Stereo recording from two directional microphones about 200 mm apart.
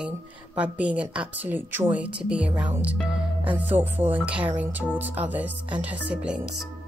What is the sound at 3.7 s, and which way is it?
A woman's voice, 10° right (ahead or behind).